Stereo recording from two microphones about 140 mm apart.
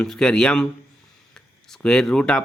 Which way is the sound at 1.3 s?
5° left (ahead or behind).